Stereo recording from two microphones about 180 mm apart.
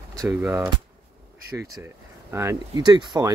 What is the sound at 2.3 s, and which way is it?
Speech, 15° right (ahead or behind).